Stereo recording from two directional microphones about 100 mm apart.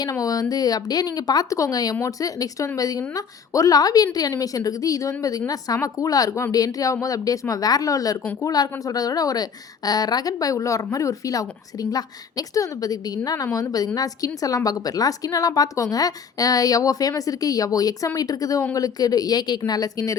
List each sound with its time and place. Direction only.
0.0 s a woman's voice: 40° left (ahead or behind)
8.2 s speech: 15° left (ahead or behind)
8.4 s a woman's voice: 40° left (ahead or behind)